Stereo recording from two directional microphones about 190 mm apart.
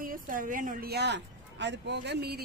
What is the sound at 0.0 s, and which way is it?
Speech, 45° right (ahead or behind).